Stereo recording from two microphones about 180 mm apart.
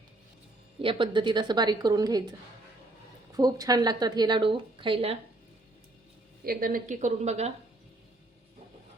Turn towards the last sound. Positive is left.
turn(degrees=-40)  # may be behind; listen again after turning